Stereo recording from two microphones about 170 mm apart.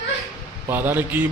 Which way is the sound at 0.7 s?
10° right (ahead or behind).